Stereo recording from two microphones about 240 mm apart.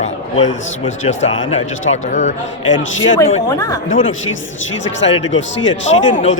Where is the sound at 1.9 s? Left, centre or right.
Left.